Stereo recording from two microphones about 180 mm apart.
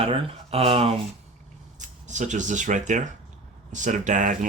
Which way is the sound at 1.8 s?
45° right (ahead or behind).